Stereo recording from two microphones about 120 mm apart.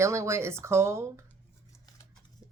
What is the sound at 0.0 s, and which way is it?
Speech, 25° right (ahead or behind).